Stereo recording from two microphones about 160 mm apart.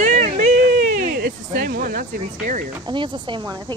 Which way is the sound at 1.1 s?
70° right (ahead or behind).